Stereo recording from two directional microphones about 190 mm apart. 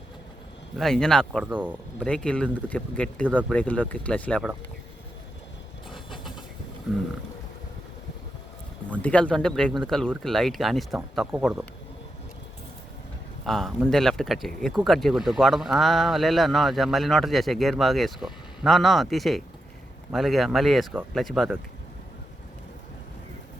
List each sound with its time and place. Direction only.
0.8 s speech: 5° left (ahead or behind)
5.9 s vehicle: centre (ahead or behind)
8.9 s speech: 5° left (ahead or behind)
13.4 s speech: centre (ahead or behind)